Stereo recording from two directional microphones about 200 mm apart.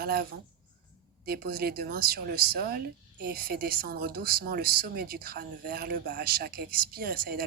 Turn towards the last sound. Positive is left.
turn(degrees=-45)  # may be behind; listen again after turning